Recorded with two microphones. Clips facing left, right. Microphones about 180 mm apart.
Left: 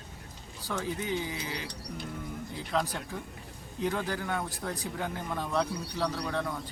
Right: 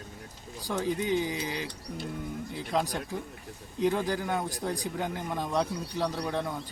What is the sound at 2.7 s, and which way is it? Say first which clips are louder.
A man's voice: right 2 dB; 15° right (ahead or behind).